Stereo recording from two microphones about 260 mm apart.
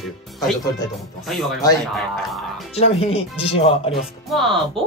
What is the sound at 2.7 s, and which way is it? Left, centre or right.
Speech, left.